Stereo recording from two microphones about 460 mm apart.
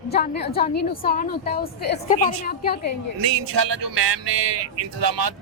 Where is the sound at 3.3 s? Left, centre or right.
Right.